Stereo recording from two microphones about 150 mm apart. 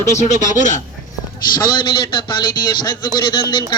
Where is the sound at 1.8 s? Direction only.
30° left (ahead or behind).